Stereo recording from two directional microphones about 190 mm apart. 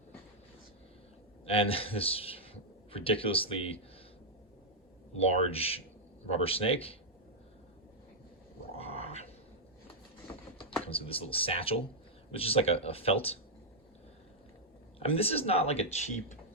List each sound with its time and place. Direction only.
1.5 s a man's voice: 30° left (ahead or behind)
5.1 s speech: 30° left (ahead or behind)
8.7 s dog: 30° left (ahead or behind)
10.8 s a man's voice: 30° left (ahead or behind)
14.9 s speech: 30° left (ahead or behind)